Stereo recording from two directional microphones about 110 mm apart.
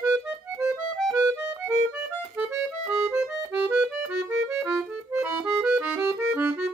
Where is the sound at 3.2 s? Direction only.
10° right (ahead or behind).